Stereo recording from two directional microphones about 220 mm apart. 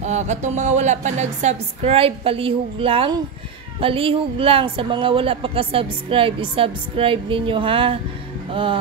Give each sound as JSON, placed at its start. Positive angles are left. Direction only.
{"t": 0.0, "sound": "speech", "side_deg": -30}